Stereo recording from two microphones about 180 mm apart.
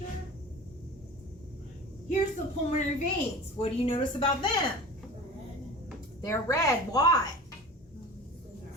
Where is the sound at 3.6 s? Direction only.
30° left (ahead or behind).